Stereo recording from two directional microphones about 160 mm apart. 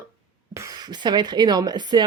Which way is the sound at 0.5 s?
20° right (ahead or behind).